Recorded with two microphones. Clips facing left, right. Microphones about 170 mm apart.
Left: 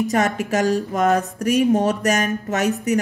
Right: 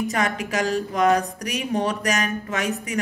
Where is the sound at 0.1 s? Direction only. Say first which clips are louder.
Left 5 dB; 45° left (ahead or behind).